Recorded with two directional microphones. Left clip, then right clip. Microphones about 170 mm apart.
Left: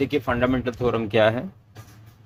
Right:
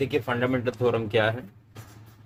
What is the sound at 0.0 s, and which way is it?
Speech, 35° left (ahead or behind).